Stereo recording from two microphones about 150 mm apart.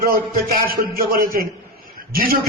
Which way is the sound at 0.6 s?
75° right (ahead or behind).